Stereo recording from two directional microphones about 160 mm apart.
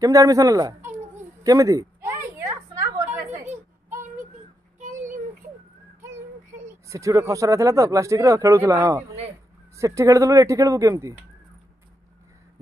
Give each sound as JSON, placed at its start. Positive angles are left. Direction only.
{"t": 0.0, "sound": "speech", "side_deg": -20}
{"t": 1.4, "sound": "a sound", "side_deg": -20}
{"t": 4.7, "sound": "child singing", "side_deg": -55}
{"t": 6.9, "sound": "speech", "side_deg": -20}